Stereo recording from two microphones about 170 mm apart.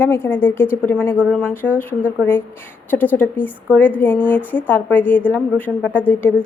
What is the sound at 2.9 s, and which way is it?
A woman's voice, 10° left (ahead or behind).